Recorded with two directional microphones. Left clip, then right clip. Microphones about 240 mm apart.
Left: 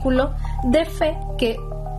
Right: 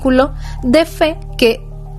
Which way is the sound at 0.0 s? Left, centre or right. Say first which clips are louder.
Right 7 dB; right.